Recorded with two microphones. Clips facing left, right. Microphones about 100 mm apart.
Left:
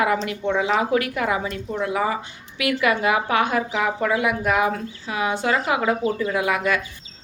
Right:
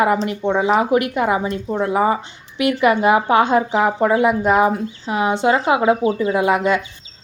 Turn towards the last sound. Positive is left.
turn(degrees=-25)  # may be behind; listen again after turning